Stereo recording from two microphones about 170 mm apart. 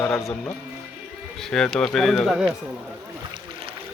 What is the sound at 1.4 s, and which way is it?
Speech, 5° left (ahead or behind).